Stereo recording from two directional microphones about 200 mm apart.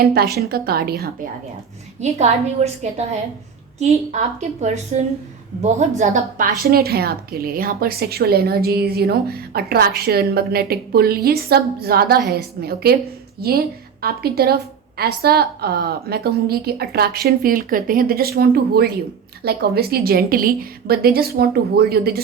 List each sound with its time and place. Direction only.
0.0 s a woman's voice: 50° right (ahead or behind)
2.0 s a woman's voice: 35° right (ahead or behind)
4.1 s a woman's voice: 35° right (ahead or behind); by 22.2 s 50° right (ahead or behind)